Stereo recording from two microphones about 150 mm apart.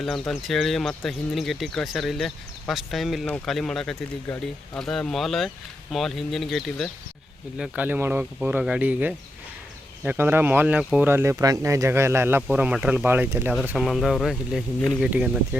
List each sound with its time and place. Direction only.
0.0 s speech: centre (ahead or behind)
7.6 s speech: 10° right (ahead or behind)
13.7 s speech: centre (ahead or behind)